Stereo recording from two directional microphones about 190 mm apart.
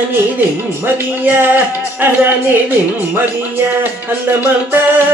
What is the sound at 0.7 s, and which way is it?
Music, 10° right (ahead or behind).